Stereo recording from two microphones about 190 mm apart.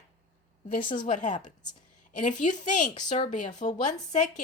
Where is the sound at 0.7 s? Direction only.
45° left (ahead or behind).